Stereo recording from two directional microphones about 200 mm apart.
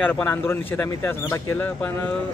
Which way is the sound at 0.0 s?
10° left (ahead or behind).